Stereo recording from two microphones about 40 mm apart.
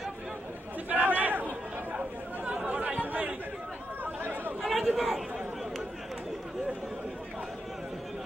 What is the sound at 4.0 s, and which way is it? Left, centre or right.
Chatter, right.